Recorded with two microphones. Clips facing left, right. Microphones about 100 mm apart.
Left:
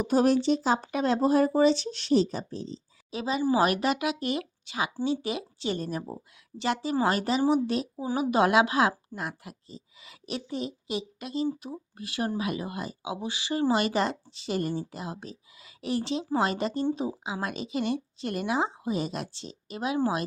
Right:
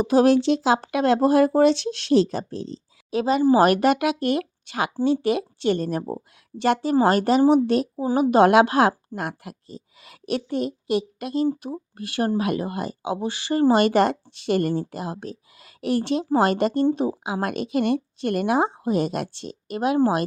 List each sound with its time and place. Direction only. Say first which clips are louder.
0.0 s speech: right 6 dB; 90° right; by 20.2 s 55° right (ahead or behind)